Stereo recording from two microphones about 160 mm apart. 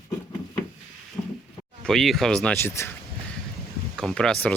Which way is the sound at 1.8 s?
Centre (ahead or behind).